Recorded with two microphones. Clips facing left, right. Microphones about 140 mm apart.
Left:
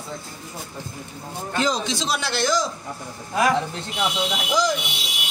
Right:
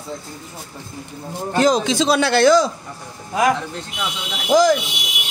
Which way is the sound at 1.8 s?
60° right (ahead or behind).